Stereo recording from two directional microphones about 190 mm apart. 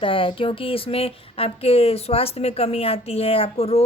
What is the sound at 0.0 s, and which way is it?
Speech, 25° left (ahead or behind).